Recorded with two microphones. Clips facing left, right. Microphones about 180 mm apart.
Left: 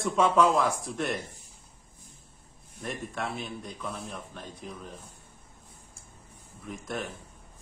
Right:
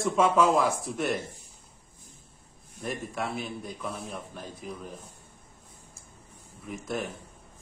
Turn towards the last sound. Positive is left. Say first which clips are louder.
# right 2 dB
turn(degrees=0)  # may be behind; listen again after turning